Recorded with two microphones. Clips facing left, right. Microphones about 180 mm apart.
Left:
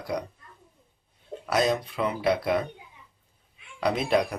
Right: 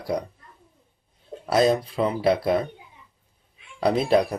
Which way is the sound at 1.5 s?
35° right (ahead or behind).